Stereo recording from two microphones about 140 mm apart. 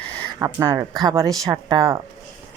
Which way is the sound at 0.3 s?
25° right (ahead or behind).